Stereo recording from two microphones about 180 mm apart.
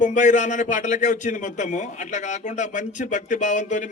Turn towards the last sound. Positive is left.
turn(degrees=45)  # may be behind; listen again after turning